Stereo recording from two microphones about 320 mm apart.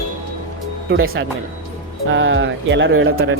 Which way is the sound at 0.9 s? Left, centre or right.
Right.